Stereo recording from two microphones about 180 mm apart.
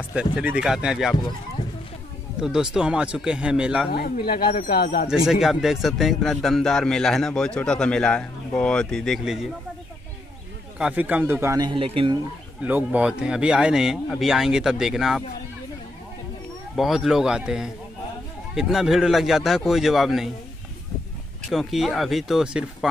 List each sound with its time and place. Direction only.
0.1 s a man's voice: 5° right (ahead or behind)
1.6 s a sound: 25° left (ahead or behind)
2.4 s a man's voice: 5° right (ahead or behind)
3.9 s speech: 60° left (ahead or behind)
5.1 s a man's voice: 5° right (ahead or behind)
10.8 s a man's voice: 10° right (ahead or behind); by 12.2 s 30° right (ahead or behind)
12.6 s a man's voice: 10° right (ahead or behind)
16.7 s a man's voice: centre (ahead or behind)
21.5 s a man's voice: centre (ahead or behind)